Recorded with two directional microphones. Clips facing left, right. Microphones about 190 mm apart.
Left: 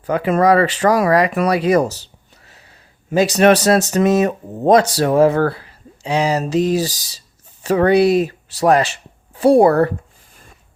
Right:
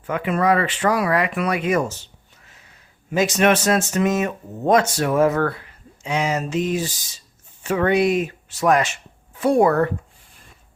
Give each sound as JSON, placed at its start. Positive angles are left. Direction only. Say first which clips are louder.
{"t": 0.0, "sound": "speech", "louder": "left 6 dB", "side_deg": 35}